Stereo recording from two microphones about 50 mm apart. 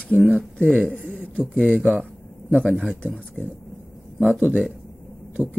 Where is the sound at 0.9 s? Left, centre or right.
Left.